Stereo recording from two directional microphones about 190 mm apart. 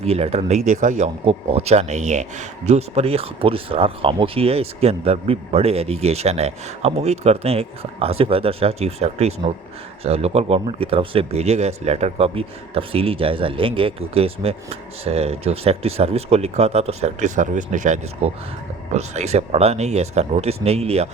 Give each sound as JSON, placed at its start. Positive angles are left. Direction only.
{"t": 0.0, "sound": "speech", "side_deg": -35}